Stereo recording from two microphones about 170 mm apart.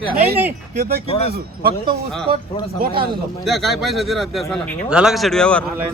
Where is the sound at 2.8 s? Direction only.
65° right (ahead or behind).